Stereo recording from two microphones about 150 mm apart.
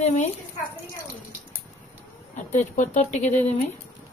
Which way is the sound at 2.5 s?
55° left (ahead or behind).